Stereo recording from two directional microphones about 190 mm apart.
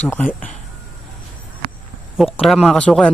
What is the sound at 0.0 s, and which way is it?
Speech, 10° left (ahead or behind).